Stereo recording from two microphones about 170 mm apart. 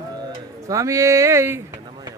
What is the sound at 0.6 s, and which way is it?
Speech, 20° right (ahead or behind).